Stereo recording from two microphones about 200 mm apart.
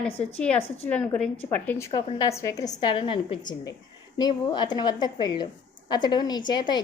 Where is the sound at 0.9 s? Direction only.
5° left (ahead or behind).